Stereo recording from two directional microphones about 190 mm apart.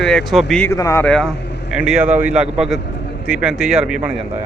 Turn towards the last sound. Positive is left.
turn(degrees=-5)  # may be behind; listen again after turning